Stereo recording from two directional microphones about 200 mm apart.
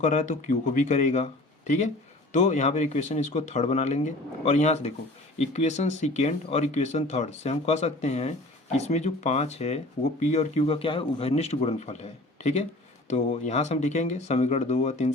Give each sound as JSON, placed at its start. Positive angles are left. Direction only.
{"t": 0.0, "sound": "speech", "side_deg": 40}